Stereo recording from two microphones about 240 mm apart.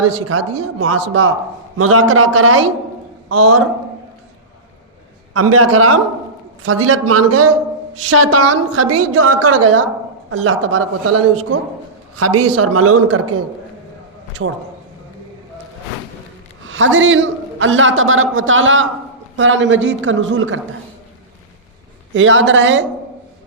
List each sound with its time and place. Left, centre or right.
0.0 s speech: right
5.3 s a woman's voice: right
10.3 s speech: right
12.2 s a woman's voice: right
14.4 s speech: right
16.6 s a man's voice: right
22.1 s a man's voice: right